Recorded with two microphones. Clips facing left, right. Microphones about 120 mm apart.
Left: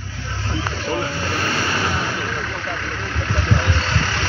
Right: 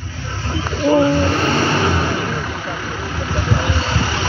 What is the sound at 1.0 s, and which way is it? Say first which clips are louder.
Speech: right 11 dB; 35° right (ahead or behind).